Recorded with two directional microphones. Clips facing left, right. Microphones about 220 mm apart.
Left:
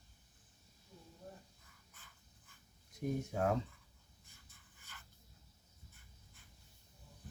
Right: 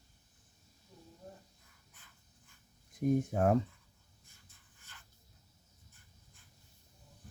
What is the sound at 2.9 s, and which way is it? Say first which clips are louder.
Speech: right 8 dB; 50° right (ahead or behind).